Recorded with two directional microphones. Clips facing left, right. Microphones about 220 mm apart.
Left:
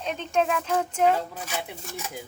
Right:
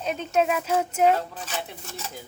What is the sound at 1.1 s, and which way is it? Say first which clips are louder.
Speech: right 1 dB; 10° left (ahead or behind).